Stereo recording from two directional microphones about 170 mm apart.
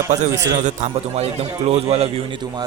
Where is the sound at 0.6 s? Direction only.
45° right (ahead or behind).